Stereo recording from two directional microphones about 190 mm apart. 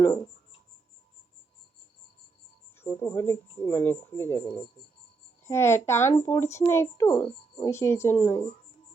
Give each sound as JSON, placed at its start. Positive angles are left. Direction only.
{"t": 0.0, "sound": "speech", "side_deg": 20}
{"t": 2.7, "sound": "speech", "side_deg": 10}